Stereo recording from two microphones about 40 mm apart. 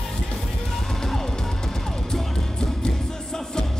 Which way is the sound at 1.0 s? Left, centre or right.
Centre.